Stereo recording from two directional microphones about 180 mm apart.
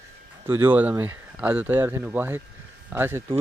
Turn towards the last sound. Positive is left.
turn(degrees=-10)  # may be behind; listen again after turning